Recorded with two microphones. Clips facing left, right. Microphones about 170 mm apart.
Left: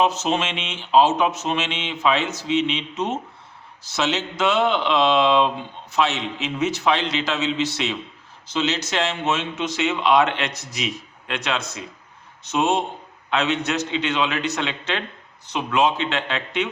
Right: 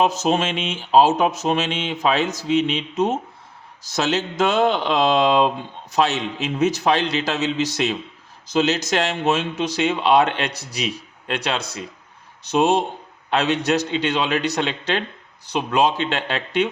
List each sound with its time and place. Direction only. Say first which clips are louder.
0.0 s speech: right 2 dB; 40° right (ahead or behind)